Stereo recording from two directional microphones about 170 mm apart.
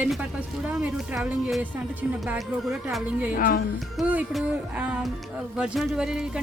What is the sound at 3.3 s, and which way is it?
Speech, 55° left (ahead or behind).